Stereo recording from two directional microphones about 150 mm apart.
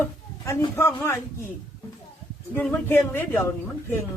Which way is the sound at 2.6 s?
15° left (ahead or behind).